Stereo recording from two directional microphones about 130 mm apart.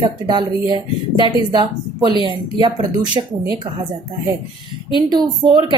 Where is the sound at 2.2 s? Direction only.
35° right (ahead or behind).